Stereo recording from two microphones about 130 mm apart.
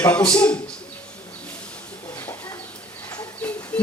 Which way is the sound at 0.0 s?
10° left (ahead or behind).